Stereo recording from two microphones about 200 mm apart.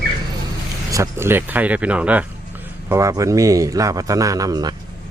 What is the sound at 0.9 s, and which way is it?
A man's voice, 15° right (ahead or behind).